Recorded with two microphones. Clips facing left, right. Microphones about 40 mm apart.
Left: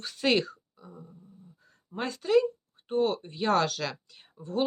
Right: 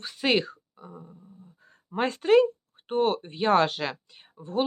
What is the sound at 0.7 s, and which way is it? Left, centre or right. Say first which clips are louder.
Beatboxing: right 3 dB; right.